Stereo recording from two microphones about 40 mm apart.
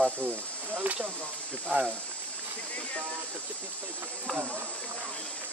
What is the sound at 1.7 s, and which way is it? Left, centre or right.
Speech, right.